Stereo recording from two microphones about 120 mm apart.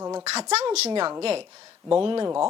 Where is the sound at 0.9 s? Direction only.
45° right (ahead or behind).